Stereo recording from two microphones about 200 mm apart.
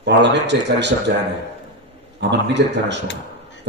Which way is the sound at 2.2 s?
60° right (ahead or behind).